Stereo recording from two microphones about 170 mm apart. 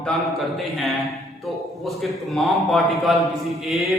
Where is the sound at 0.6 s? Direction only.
Centre (ahead or behind).